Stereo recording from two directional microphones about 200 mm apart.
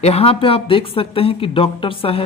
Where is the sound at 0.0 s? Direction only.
30° left (ahead or behind).